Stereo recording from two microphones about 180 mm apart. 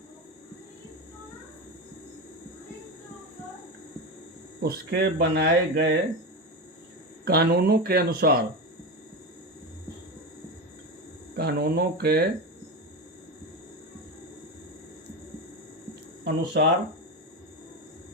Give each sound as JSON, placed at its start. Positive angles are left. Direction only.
{"t": 4.6, "sound": "speech", "side_deg": -65}
{"t": 7.3, "sound": "speech", "side_deg": -60}
{"t": 11.3, "sound": "speech", "side_deg": -60}
{"t": 16.2, "sound": "speech", "side_deg": -65}